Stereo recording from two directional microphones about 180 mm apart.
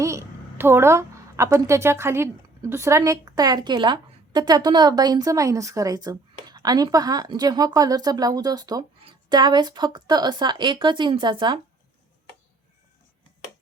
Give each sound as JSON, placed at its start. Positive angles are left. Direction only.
{"t": 0.0, "sound": "a woman's voice", "side_deg": -15}